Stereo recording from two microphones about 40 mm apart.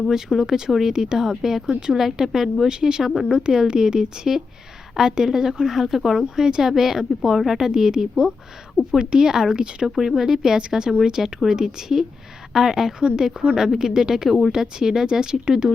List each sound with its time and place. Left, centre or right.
0.1 s speech: centre
6.3 s speech: centre
13.0 s a woman's voice: right
13.6 s speech: centre